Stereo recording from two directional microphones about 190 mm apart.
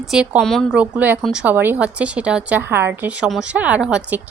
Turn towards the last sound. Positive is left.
turn(degrees=-10)  # may be behind; listen again after turning